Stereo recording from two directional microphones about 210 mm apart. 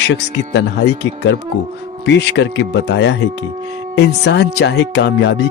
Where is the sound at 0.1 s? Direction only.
55° left (ahead or behind).